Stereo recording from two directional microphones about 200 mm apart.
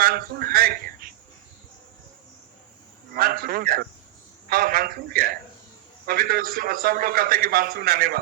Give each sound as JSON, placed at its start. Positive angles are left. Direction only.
{"t": 0.0, "sound": "speech", "side_deg": -45}
{"t": 3.2, "sound": "a man's voice", "side_deg": -50}